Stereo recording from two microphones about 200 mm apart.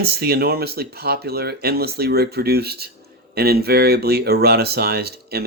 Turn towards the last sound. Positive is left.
turn(degrees=-50)  # may be behind; listen again after turning